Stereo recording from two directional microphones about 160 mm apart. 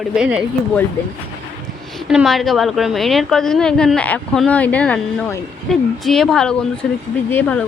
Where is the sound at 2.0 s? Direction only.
Centre (ahead or behind).